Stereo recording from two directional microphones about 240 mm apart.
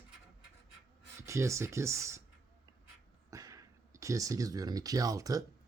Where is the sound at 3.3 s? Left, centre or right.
Centre.